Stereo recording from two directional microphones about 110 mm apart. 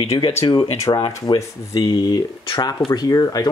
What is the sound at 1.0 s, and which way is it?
Speech, 45° left (ahead or behind).